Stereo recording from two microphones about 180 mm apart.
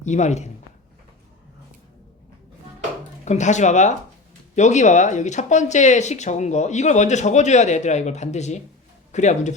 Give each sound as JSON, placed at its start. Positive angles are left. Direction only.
{"t": 0.0, "sound": "speech", "side_deg": 40}
{"t": 3.2, "sound": "speech", "side_deg": 40}